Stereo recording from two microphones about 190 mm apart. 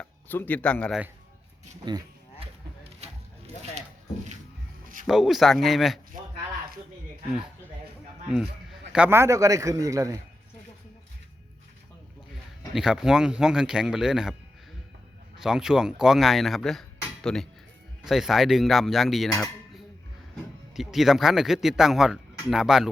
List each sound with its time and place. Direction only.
0.0 s speech: 10° left (ahead or behind)
1.8 s speech: 20° right (ahead or behind)
3.0 s a sound: 35° right (ahead or behind)
5.0 s speech: centre (ahead or behind)
8.9 s a man's voice: 10° right (ahead or behind)
12.7 s speech: 5° right (ahead or behind)
15.4 s speech: 5° right (ahead or behind)
20.7 s speech: centre (ahead or behind)